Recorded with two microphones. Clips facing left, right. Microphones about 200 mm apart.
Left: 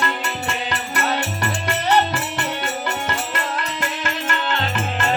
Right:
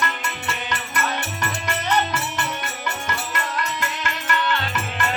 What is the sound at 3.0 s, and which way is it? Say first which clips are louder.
Music: left 3 dB; 30° left (ahead or behind).